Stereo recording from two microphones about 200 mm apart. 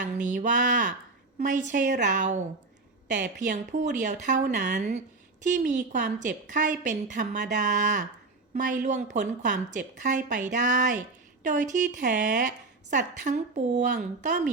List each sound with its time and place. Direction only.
0.0 s speech: 40° right (ahead or behind)